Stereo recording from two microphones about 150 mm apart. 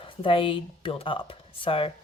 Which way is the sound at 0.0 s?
35° left (ahead or behind).